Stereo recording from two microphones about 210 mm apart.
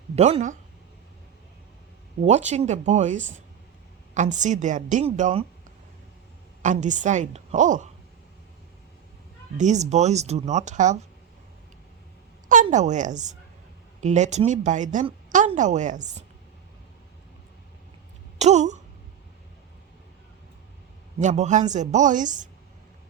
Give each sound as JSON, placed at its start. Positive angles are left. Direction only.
{"t": 0.2, "sound": "a woman's voice", "side_deg": -30}
{"t": 2.2, "sound": "a woman's voice", "side_deg": -35}
{"t": 6.6, "sound": "a woman's voice", "side_deg": -35}
{"t": 9.6, "sound": "a woman's voice", "side_deg": -35}
{"t": 12.6, "sound": "a woman's voice", "side_deg": -35}
{"t": 18.3, "sound": "speech", "side_deg": -35}
{"t": 21.2, "sound": "a woman's voice", "side_deg": -35}